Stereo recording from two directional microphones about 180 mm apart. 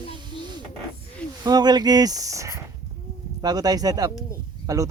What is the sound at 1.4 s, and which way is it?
Speech, 25° right (ahead or behind).